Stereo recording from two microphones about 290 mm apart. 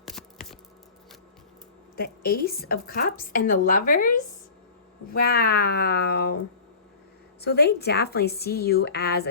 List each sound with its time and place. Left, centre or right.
0.0 s a sound: centre
2.0 s a woman's voice: left
5.1 s a woman's voice: left
7.4 s a woman's voice: left